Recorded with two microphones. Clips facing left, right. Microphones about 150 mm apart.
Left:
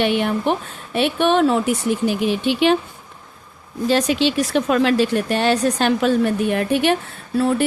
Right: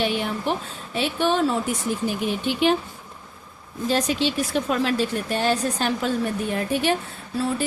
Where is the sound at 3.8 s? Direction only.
80° left.